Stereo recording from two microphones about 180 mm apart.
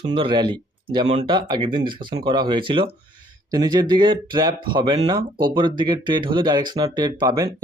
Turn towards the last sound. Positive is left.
turn(degrees=-20)  # may be behind; listen again after turning